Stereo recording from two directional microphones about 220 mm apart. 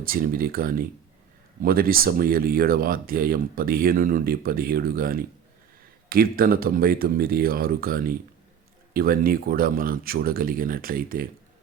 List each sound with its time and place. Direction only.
0.0 s speech: 40° right (ahead or behind)